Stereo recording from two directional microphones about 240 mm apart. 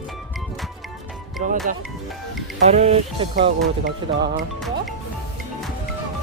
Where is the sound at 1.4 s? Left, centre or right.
Right.